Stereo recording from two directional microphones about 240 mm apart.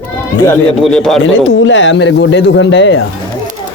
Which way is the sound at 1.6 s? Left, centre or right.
Left.